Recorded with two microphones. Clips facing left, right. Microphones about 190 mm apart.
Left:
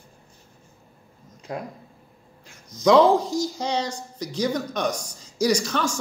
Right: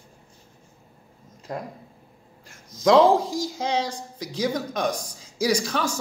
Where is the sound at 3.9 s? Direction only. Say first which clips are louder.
Left 1 dB; 90° right.